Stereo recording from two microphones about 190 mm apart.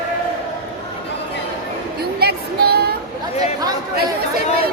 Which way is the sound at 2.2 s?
55° right (ahead or behind).